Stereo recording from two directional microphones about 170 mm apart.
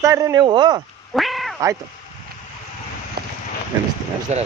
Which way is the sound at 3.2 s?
65° right (ahead or behind).